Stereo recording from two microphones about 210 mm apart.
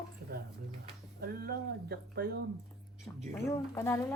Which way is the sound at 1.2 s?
45° right (ahead or behind).